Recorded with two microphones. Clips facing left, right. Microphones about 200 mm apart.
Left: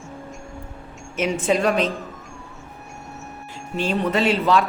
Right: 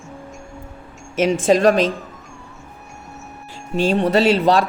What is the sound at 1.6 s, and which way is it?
Speech, 90° right.